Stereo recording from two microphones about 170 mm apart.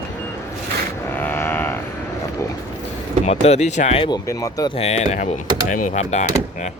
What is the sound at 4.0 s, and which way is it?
Speech, 25° left (ahead or behind).